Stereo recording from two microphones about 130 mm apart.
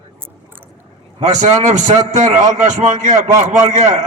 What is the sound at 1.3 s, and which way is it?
A man's voice, 70° right (ahead or behind).